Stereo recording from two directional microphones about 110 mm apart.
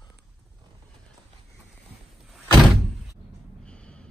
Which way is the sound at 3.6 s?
10° left (ahead or behind).